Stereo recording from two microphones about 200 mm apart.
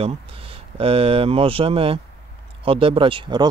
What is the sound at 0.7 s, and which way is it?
Speech, 30° right (ahead or behind).